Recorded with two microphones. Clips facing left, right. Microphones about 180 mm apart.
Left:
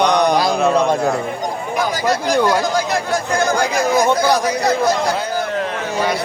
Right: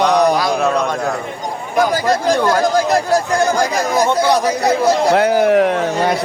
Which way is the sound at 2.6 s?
45° right (ahead or behind).